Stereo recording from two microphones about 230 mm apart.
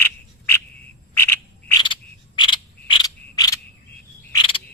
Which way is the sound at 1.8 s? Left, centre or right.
Left.